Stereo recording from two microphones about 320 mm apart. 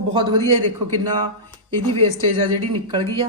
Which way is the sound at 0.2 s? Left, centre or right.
Centre.